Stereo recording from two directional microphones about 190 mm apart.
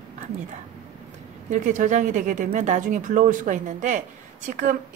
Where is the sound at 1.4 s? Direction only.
40° right (ahead or behind).